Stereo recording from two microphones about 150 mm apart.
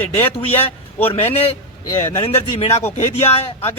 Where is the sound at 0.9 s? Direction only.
40° left (ahead or behind).